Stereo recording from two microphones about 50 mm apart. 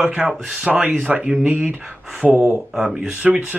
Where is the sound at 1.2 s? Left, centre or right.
Centre.